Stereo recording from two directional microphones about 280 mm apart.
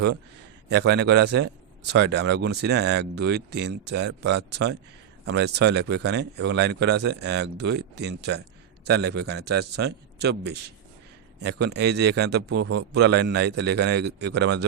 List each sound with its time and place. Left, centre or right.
0.7 s a man's voice: right
11.6 s a man's voice: right